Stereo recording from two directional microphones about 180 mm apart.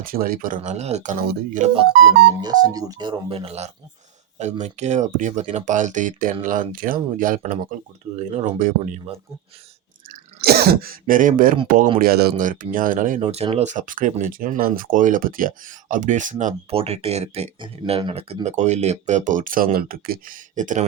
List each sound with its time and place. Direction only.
0.0 s speech: 55° right (ahead or behind)
2.0 s speech: 25° right (ahead or behind); by 9.0 s 50° right (ahead or behind)
10.1 s throat clearing: 60° right (ahead or behind)
11.9 s speech: 55° right (ahead or behind)
13.1 s speech: 35° right (ahead or behind)